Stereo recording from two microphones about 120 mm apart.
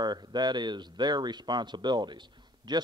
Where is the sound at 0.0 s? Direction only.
35° right (ahead or behind).